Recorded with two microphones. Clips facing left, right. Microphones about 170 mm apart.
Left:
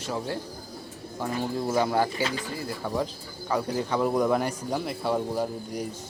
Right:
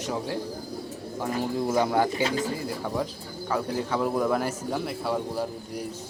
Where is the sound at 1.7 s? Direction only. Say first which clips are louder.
Right 1 dB; 15° right (ahead or behind).